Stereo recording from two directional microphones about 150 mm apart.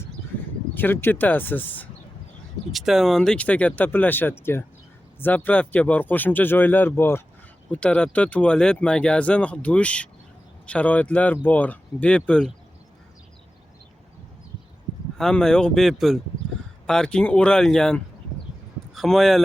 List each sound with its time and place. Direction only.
0.7 s speech: 15° left (ahead or behind)
2.7 s speech: centre (ahead or behind)
15.2 s speech: 5° left (ahead or behind)